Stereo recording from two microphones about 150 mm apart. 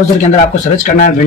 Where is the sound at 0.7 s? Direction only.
60° left (ahead or behind).